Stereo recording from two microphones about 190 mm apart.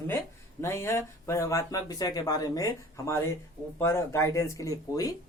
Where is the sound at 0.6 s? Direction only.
15° left (ahead or behind).